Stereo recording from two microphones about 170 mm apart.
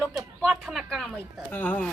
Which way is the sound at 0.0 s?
5° right (ahead or behind).